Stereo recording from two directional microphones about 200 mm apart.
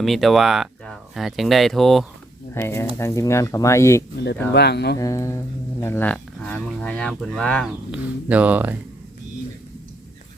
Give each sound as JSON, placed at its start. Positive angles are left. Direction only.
{"t": 0.0, "sound": "speech", "side_deg": 0}
{"t": 2.6, "sound": "speech", "side_deg": 15}
{"t": 4.5, "sound": "speech", "side_deg": 55}
{"t": 4.9, "sound": "speech", "side_deg": 15}